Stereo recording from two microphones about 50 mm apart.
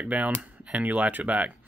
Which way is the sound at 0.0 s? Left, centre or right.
Right.